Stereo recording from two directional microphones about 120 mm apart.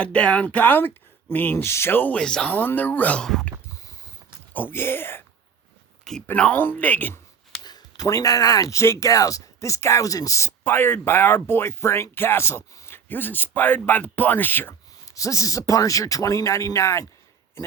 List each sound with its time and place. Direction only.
0.0 s speech: 10° left (ahead or behind)
4.5 s speech: 20° left (ahead or behind)
6.2 s speech: 10° left (ahead or behind)
7.6 s speech: 35° left (ahead or behind)